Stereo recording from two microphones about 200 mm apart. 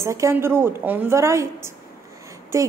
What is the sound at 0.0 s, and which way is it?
A woman's voice, 15° right (ahead or behind).